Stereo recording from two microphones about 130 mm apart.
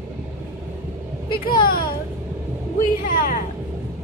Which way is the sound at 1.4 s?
35° left (ahead or behind).